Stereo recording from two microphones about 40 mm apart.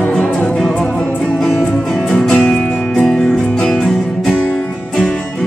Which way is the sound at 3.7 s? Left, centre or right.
Centre.